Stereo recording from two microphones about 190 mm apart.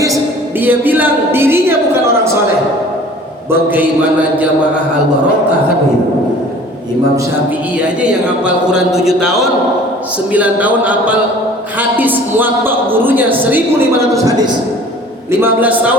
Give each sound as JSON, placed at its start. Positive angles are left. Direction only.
{"t": 0.6, "sound": "a man's voice", "side_deg": -10}
{"t": 3.5, "sound": "a man's voice", "side_deg": -10}
{"t": 7.8, "sound": "a man's voice", "side_deg": -5}